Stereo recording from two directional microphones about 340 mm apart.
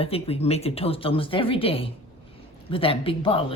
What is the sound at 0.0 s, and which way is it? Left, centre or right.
A woman's voice, centre.